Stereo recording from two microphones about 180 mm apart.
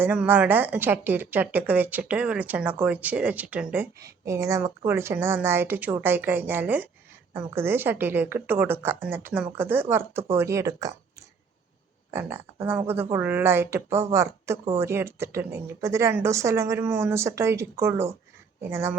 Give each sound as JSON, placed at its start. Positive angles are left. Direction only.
{"t": 0.0, "sound": "speech", "side_deg": -10}
{"t": 12.1, "sound": "speech", "side_deg": -15}